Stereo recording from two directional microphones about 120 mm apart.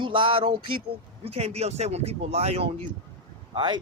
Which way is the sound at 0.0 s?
45° right (ahead or behind).